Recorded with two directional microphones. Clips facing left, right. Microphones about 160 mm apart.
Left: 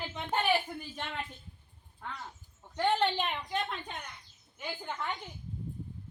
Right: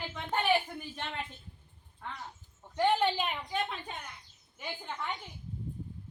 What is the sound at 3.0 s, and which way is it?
Speech, 5° right (ahead or behind).